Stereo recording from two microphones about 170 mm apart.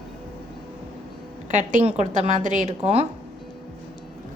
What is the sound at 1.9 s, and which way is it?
Speech, 40° right (ahead or behind).